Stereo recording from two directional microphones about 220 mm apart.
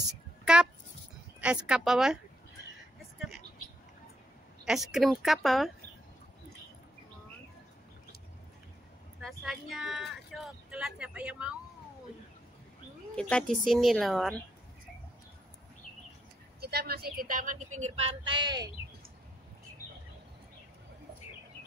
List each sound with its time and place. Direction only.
0.5 s speech: 5° right (ahead or behind)
4.6 s speech: centre (ahead or behind)
9.4 s speech: centre (ahead or behind)
13.1 s speech: 5° left (ahead or behind)
16.6 s speech: 45° right (ahead or behind); by 18.7 s 20° right (ahead or behind)